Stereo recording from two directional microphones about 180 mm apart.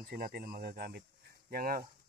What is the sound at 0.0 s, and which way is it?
Speech, 60° right (ahead or behind).